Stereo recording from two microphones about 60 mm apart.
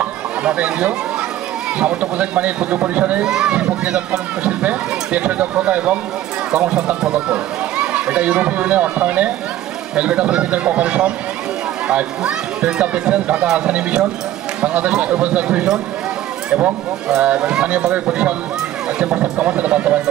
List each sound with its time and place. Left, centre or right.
0.0 s a sound: right
1.8 s speech: right
3.3 s speech: centre